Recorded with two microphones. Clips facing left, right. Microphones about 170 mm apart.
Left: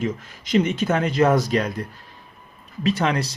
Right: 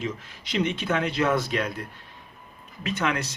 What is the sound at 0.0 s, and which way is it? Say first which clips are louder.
Speech: left 6 dB; 45° left (ahead or behind).